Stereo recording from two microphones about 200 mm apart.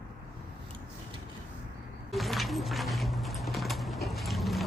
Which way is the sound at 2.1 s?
Centre (ahead or behind).